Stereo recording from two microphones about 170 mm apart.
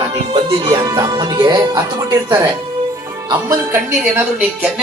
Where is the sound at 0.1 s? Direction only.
25° right (ahead or behind).